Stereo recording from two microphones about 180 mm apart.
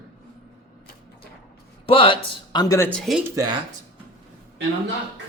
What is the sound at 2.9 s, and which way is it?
Speech, centre (ahead or behind).